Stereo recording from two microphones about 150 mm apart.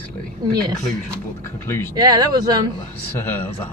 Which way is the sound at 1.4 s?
15° left (ahead or behind).